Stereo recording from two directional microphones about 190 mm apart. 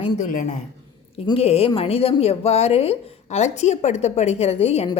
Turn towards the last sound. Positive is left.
turn(degrees=35)  # may be behind; listen again after turning